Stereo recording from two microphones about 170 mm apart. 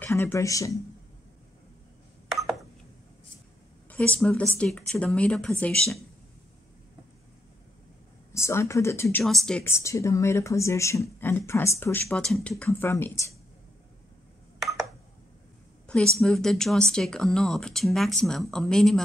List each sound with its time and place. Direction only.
0.0 s speech: 15° left (ahead or behind)
3.9 s speech: 5° left (ahead or behind)
8.3 s speech: 15° left (ahead or behind)
9.2 s speech: centre (ahead or behind)
9.7 s speech: 15° left (ahead or behind)
16.2 s speech: 5° left (ahead or behind)